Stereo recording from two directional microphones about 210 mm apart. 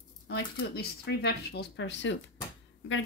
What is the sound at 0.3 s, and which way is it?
Speech, 55° left (ahead or behind).